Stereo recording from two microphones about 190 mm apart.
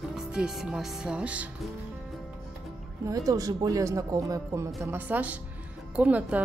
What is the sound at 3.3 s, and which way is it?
Speech, 20° right (ahead or behind).